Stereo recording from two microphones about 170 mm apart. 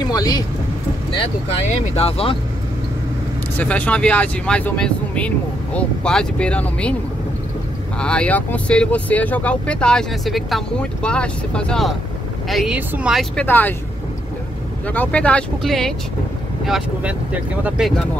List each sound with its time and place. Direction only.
0.0 s speech: 20° left (ahead or behind)
1.7 s speech: 35° left (ahead or behind)
3.5 s speech: 10° left (ahead or behind)
8.0 s speech: 5° left (ahead or behind)
14.9 s speech: 10° left (ahead or behind)